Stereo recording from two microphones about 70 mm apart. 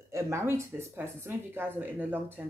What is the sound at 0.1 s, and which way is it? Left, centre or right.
Speech, right.